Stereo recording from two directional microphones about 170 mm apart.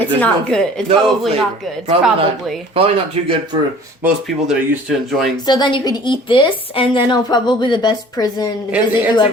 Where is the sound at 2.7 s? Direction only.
30° right (ahead or behind).